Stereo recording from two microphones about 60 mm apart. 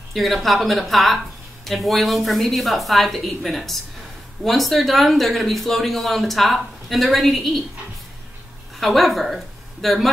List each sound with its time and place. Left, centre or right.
0.1 s speech: centre
8.7 s a woman's voice: centre